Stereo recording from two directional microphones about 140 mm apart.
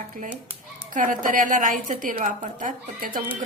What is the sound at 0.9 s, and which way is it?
A woman's voice, 75° right (ahead or behind).